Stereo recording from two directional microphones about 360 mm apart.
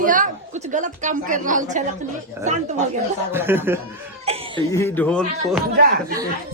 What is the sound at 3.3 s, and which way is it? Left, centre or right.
Speech, centre.